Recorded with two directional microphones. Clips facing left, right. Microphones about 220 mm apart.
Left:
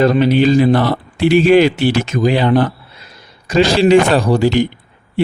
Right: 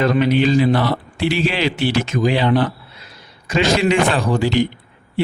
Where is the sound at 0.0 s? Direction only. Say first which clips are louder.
Left 4 dB; 35° left (ahead or behind).